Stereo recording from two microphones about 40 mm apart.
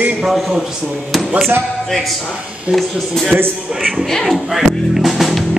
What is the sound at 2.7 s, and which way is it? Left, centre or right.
Speech, centre.